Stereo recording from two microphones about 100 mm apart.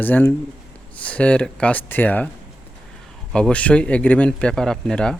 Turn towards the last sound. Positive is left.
turn(degrees=10)  # may be behind; listen again after turning